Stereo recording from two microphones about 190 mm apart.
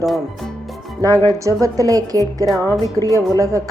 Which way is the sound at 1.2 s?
15° right (ahead or behind).